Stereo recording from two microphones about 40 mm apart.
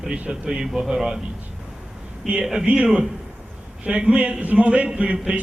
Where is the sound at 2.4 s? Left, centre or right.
Centre.